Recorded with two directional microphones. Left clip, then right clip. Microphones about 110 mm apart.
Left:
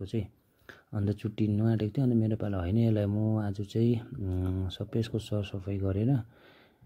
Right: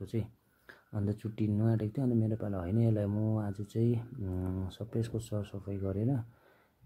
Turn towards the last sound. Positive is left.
turn(degrees=35)  # may be behind; listen again after turning